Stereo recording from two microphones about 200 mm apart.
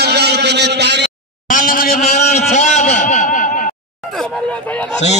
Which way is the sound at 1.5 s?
45° left (ahead or behind).